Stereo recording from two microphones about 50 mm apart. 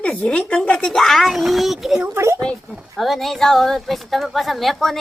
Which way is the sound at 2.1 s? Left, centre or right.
Right.